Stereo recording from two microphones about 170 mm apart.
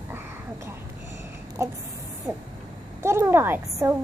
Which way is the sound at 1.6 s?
15° right (ahead or behind).